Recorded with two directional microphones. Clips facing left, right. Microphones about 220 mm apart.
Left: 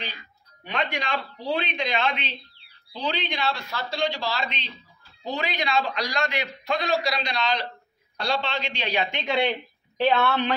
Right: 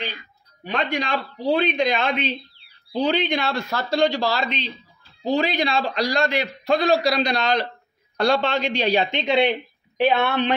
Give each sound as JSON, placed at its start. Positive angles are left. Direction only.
{"t": 0.7, "sound": "a man's voice", "side_deg": -35}
{"t": 9.1, "sound": "speech", "side_deg": -20}